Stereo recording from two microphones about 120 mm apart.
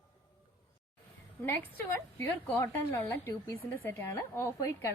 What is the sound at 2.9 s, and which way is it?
A woman's voice, 25° left (ahead or behind).